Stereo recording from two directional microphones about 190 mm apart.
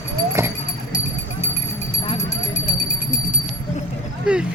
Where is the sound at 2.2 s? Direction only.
35° left (ahead or behind).